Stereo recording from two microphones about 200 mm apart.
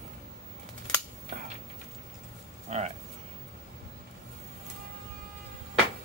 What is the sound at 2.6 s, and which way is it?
Speech, 35° right (ahead or behind).